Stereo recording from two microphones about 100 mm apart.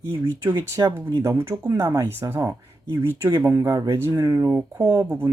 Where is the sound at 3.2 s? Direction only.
40° right (ahead or behind).